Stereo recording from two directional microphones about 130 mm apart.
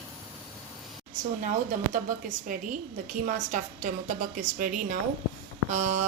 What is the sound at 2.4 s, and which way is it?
A woman's voice, 90° right.